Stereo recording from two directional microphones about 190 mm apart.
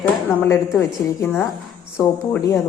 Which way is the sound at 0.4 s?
15° left (ahead or behind).